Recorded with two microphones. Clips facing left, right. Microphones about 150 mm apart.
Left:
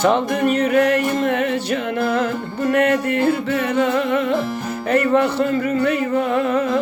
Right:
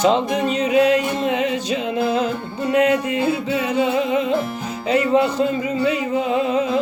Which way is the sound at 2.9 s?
10° right (ahead or behind).